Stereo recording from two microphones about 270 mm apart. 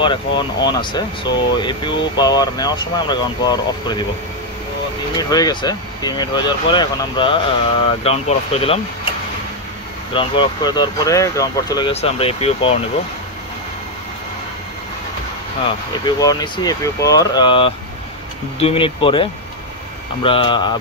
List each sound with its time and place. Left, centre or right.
0.0 s speech: centre
5.1 s speech: centre
10.1 s speech: centre
16.2 s speech: centre
20.2 s speech: centre